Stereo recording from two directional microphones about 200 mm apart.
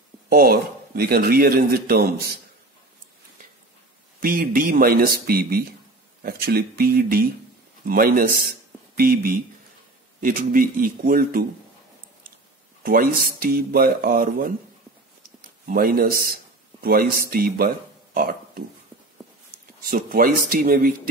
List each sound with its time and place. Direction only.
0.3 s a man's voice: 50° right (ahead or behind)
4.2 s a man's voice: 45° right (ahead or behind)
12.8 s a man's voice: 45° right (ahead or behind)
15.6 s a man's voice: 45° right (ahead or behind)
19.8 s a man's voice: 45° right (ahead or behind)